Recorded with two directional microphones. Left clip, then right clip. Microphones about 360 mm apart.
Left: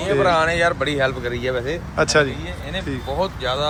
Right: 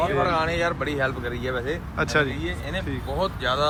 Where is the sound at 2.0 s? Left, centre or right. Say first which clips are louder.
Left 6 dB; centre.